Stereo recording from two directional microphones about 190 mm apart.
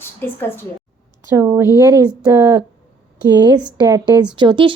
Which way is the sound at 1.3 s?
15° right (ahead or behind).